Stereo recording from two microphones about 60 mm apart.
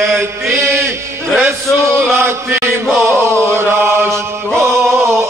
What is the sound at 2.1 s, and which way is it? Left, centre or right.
Chant, right.